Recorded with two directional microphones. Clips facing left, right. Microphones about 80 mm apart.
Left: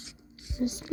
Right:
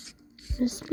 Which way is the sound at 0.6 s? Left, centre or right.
Right.